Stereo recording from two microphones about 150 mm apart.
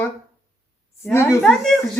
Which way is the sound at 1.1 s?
15° left (ahead or behind).